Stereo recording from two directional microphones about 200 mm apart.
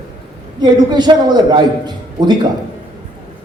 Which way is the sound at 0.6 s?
20° right (ahead or behind).